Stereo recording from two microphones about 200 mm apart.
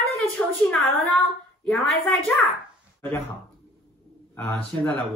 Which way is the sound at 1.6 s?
5° left (ahead or behind).